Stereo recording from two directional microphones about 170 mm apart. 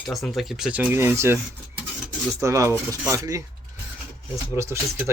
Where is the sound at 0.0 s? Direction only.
Centre (ahead or behind); by 1.4 s 15° right (ahead or behind).